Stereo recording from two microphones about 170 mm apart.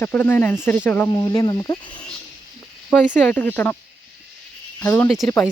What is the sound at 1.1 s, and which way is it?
Speech, 20° left (ahead or behind).